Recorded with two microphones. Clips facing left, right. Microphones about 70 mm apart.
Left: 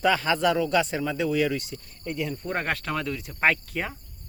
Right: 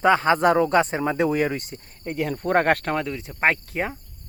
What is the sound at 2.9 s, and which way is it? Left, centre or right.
Speech, right.